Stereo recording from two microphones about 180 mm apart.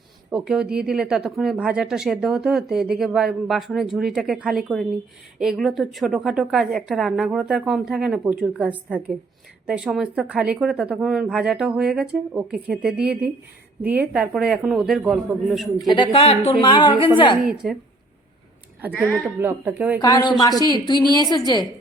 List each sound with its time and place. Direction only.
0.3 s speech: 5° right (ahead or behind)
15.9 s a woman's voice: 30° left (ahead or behind)
17.4 s speech: 5° right (ahead or behind)
18.9 s speech: 5° right (ahead or behind)
20.0 s a woman's voice: 20° left (ahead or behind)